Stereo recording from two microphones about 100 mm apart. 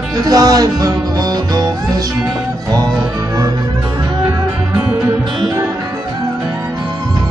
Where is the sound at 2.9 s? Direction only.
5° right (ahead or behind).